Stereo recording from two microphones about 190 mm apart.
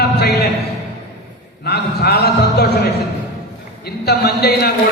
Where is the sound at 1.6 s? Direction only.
60° left (ahead or behind).